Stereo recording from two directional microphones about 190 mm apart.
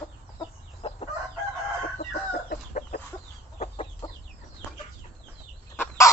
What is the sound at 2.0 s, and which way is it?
Chicken, 45° left (ahead or behind).